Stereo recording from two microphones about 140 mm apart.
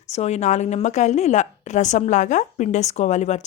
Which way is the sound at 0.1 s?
55° left (ahead or behind).